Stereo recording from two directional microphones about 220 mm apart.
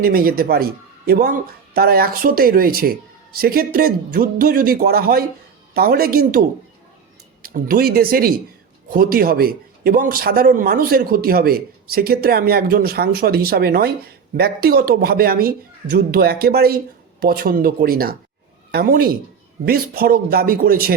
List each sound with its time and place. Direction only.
0.0 s speech: 40° right (ahead or behind)
7.4 s speech: 40° right (ahead or behind)